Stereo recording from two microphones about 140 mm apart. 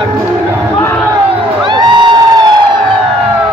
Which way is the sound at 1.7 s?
30° right (ahead or behind).